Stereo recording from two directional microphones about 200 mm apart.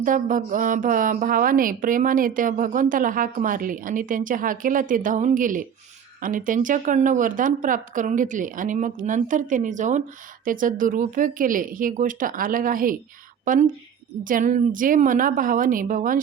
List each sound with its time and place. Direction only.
0.0 s a woman's voice: 40° right (ahead or behind)